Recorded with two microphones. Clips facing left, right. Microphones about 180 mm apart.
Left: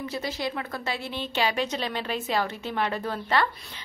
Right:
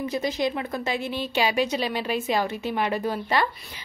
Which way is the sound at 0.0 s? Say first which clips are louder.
Right 5 dB; 20° right (ahead or behind).